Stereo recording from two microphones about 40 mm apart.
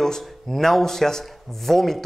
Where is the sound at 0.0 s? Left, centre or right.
Centre.